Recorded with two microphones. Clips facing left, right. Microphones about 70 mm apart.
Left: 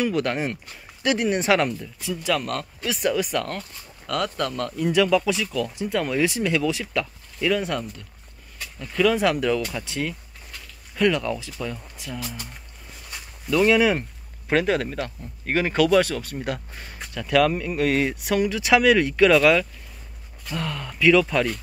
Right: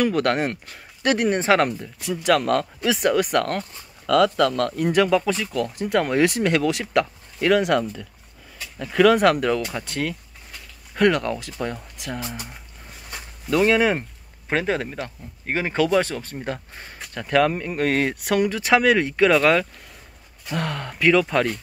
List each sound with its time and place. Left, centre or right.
0.0 s speech: right
1.4 s speech: right
2.0 s speech: right
3.0 s speech: right
4.4 s speech: right
4.8 s speech: right
5.9 s speech: right
7.4 s speech: right
12.2 s speech: right
13.6 s speech: right
17.7 s speech: right
20.5 s speech: right
20.9 s speech: right